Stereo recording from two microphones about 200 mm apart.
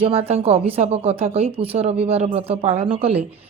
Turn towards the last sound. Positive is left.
turn(degrees=-30)  # may be behind; listen again after turning